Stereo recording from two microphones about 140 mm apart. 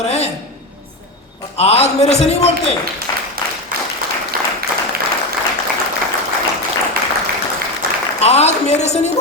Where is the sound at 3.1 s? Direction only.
25° left (ahead or behind).